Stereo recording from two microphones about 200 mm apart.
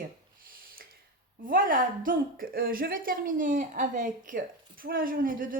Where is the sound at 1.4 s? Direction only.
45° right (ahead or behind).